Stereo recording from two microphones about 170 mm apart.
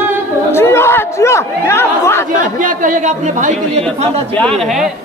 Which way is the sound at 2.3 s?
50° right (ahead or behind).